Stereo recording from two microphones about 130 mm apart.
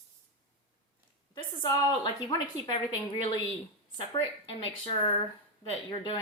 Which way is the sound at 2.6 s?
35° left (ahead or behind).